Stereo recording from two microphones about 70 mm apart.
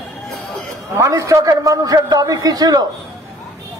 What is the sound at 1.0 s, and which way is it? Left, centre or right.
A man's voice, right.